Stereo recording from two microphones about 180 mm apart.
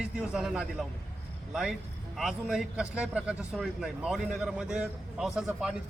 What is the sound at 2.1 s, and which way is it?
A man's voice, centre (ahead or behind).